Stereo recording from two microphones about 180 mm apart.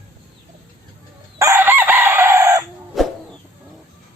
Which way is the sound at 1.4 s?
15° right (ahead or behind).